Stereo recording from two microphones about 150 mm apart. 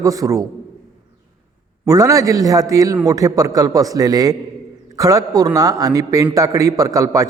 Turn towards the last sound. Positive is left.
turn(degrees=-20)  # may be behind; listen again after turning